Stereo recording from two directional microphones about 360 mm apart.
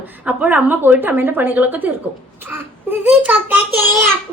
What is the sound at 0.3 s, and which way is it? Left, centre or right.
A woman's voice, centre.